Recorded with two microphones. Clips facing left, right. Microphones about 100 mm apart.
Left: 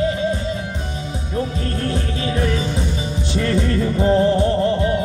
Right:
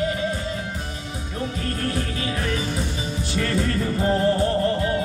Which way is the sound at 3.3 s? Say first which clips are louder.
Left 4 dB; 30° left (ahead or behind).